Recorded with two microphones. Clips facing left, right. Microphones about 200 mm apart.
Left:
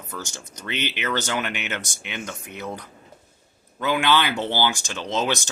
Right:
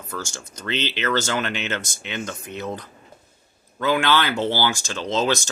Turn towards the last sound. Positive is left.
turn(degrees=15)  # may be behind; listen again after turning